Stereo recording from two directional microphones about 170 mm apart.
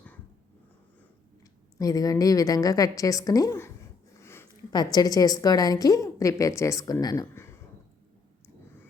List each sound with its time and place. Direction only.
1.8 s a woman's voice: 20° left (ahead or behind)